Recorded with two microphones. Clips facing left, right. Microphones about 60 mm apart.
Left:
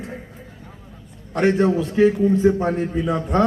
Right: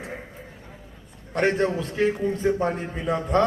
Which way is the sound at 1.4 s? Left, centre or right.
Centre.